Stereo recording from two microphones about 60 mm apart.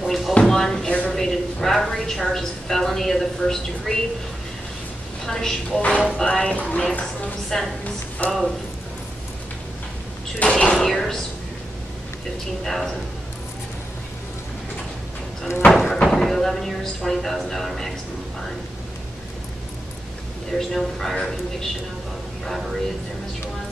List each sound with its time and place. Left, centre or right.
0.0 s a sound: centre
1.1 s a woman's voice: centre
5.2 s speech: centre
5.8 s speech: left; by 8.5 s centre
10.5 s speech: centre
12.6 s speech: centre
15.7 s speech: centre
20.5 s speech: centre